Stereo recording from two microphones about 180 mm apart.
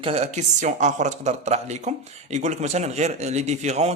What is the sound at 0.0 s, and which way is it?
Speech, 35° right (ahead or behind).